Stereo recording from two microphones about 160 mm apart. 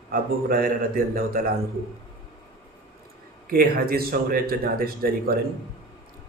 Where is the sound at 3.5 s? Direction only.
65° right (ahead or behind).